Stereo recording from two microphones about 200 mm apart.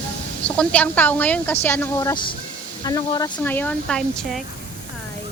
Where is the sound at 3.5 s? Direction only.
10° left (ahead or behind).